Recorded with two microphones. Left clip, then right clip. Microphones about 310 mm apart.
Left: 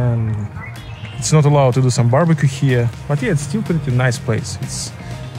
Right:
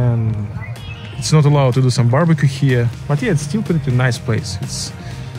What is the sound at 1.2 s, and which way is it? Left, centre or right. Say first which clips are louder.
Speech: left 2 dB; centre.